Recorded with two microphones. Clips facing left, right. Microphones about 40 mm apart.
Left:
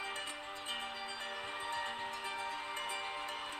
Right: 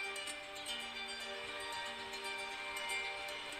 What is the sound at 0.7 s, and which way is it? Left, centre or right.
Music, left.